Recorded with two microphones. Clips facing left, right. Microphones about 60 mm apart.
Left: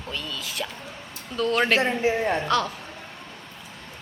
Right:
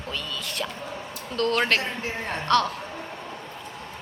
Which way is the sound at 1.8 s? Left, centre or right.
Left.